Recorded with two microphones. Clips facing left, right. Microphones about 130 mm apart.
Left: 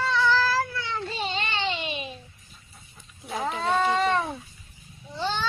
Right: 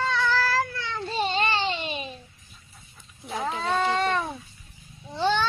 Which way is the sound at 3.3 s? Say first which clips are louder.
Even; 20° left (ahead or behind).